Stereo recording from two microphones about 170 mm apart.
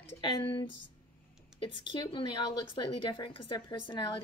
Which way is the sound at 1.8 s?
30° left (ahead or behind).